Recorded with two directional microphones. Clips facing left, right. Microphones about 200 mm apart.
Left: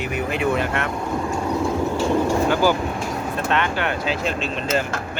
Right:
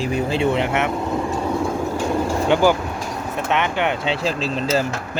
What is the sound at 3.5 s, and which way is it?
Speech, 20° right (ahead or behind).